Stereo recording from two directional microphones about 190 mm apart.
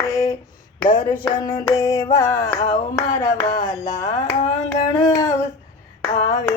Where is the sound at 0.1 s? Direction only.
20° left (ahead or behind).